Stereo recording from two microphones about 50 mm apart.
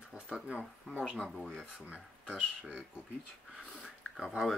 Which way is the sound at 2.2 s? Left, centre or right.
Centre.